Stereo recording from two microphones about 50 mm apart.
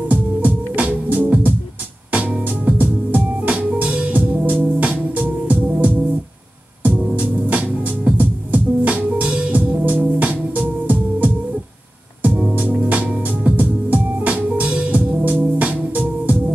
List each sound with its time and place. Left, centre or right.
0.1 s music: right
12.5 s music: right